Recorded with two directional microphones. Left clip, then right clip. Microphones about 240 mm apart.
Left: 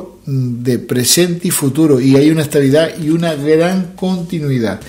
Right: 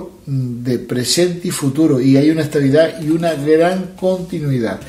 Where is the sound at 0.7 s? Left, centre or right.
Left.